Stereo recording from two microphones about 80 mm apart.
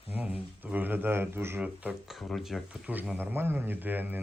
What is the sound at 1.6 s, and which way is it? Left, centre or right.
Speech, centre.